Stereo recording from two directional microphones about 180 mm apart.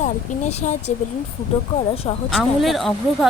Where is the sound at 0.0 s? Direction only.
40° left (ahead or behind).